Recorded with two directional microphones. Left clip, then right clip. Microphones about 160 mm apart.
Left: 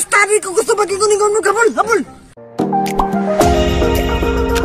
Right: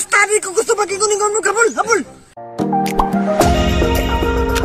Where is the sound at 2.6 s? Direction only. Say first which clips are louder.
Left 1 dB; centre (ahead or behind).